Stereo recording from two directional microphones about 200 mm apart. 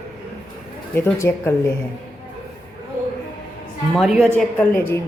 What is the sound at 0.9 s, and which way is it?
Speech, 10° left (ahead or behind).